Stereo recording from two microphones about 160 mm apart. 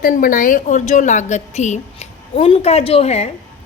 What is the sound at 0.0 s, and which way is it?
A woman's voice, 60° left (ahead or behind).